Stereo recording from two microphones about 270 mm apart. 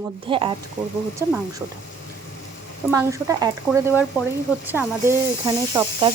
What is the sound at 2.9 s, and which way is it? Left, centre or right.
Speech, centre.